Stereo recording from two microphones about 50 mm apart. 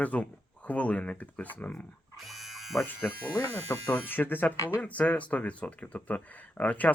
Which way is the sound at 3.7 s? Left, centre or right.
Left.